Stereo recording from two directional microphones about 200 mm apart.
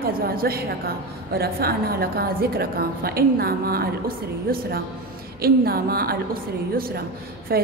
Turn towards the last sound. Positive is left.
turn(degrees=-50)  # may be behind; listen again after turning